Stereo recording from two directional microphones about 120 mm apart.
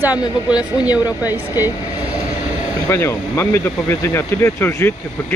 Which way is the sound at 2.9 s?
20° left (ahead or behind).